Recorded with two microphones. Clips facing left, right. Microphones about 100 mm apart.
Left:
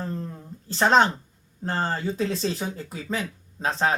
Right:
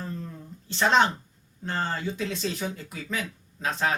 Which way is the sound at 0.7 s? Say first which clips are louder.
Left 3 dB; 40° left (ahead or behind).